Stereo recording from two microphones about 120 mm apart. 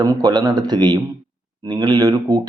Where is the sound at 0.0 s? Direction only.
30° right (ahead or behind).